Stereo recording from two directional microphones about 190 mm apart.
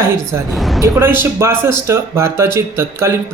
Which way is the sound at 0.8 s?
10° right (ahead or behind).